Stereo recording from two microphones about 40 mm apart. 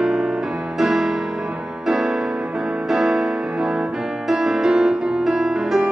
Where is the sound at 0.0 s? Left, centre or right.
Centre.